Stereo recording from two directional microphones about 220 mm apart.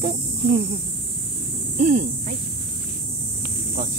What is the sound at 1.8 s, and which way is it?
Speech, 35° right (ahead or behind).